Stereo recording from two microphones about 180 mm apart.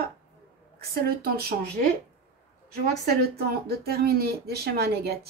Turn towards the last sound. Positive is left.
turn(degrees=-60)  # may be behind; listen again after turning